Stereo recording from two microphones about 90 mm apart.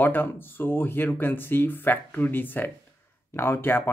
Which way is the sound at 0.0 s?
20° left (ahead or behind).